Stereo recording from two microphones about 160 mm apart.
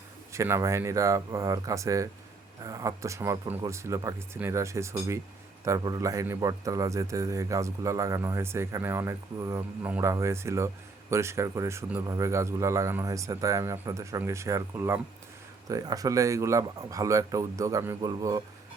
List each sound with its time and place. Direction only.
0.3 s a man's voice: 15° right (ahead or behind)